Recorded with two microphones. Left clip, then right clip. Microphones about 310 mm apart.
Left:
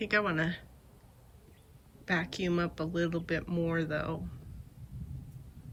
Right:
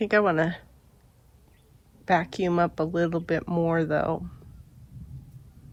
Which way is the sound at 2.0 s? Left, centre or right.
Centre.